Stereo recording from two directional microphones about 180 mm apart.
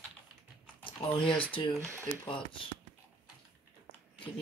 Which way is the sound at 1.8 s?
15° right (ahead or behind).